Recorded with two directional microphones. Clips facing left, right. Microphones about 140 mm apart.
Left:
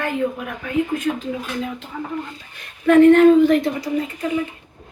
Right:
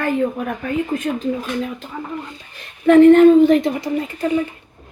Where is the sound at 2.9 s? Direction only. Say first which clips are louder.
Right 2 dB; 25° right (ahead or behind).